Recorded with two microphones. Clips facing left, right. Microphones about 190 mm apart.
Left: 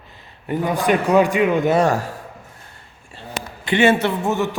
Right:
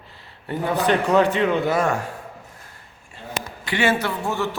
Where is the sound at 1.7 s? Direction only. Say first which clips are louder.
Left 4 dB; 35° left (ahead or behind).